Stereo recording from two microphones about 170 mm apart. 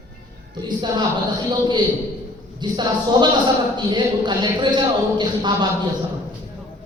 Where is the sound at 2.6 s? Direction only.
25° right (ahead or behind).